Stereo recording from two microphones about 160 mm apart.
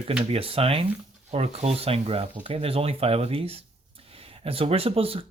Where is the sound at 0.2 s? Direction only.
35° right (ahead or behind).